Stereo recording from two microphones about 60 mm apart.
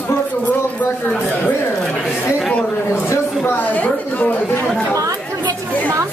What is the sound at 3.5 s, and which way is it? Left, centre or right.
Speech, left.